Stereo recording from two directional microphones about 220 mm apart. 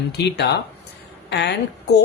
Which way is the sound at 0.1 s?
50° left (ahead or behind).